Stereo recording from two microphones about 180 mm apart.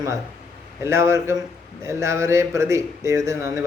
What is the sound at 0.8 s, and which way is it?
Speech, 15° right (ahead or behind).